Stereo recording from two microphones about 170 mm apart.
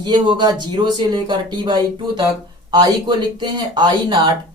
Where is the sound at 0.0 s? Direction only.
25° right (ahead or behind).